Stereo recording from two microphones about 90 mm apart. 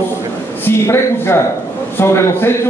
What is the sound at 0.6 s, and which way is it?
A man's voice, 25° left (ahead or behind).